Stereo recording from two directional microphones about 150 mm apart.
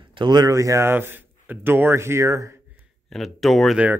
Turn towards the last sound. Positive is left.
turn(degrees=-5)  # may be behind; listen again after turning